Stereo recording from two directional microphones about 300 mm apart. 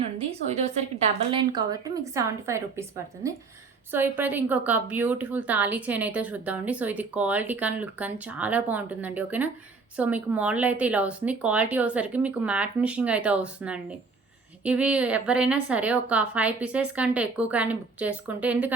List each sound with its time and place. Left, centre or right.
0.2 s a woman's voice: right
3.9 s a woman's voice: centre